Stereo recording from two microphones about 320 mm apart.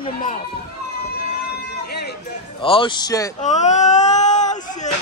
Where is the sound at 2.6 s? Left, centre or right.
Centre.